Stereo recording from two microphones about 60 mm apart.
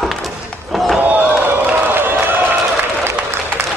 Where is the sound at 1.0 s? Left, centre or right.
Right.